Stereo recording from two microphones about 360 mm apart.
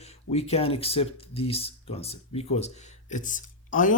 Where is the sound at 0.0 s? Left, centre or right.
Centre.